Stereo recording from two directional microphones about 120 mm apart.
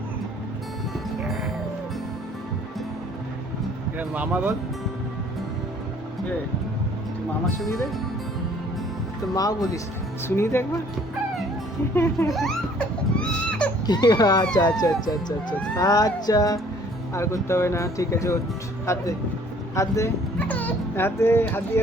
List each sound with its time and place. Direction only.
3.9 s speech: 15° right (ahead or behind)
9.3 s speech: 30° left (ahead or behind)
11.9 s speech: 20° left (ahead or behind)
12.3 s baby cry: centre (ahead or behind)
13.8 s speech: 35° left (ahead or behind)
20.5 s speech: 15° left (ahead or behind)